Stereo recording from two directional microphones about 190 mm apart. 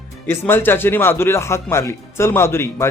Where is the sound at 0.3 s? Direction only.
10° left (ahead or behind).